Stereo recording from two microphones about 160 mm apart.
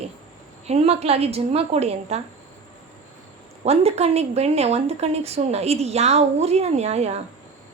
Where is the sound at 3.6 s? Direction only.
40° right (ahead or behind).